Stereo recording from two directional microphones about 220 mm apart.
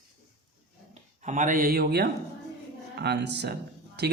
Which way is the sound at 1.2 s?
35° right (ahead or behind).